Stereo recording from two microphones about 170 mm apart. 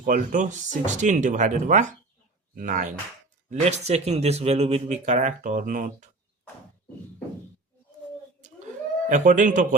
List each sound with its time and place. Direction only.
0.0 s speech: 50° right (ahead or behind)
9.0 s speech: 45° right (ahead or behind)